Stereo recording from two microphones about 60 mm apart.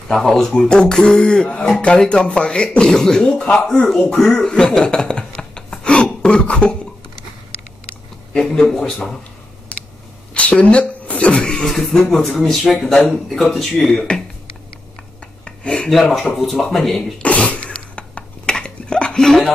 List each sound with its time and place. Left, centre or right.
0.1 s speech: centre
4.0 s speech: left
4.3 s a sound: centre
6.2 s speech: centre
8.3 s speech: centre
10.3 s speech: left; by 14.0 s centre
15.4 s dishes: centre
16.2 s speech: centre
17.2 s sneeze: left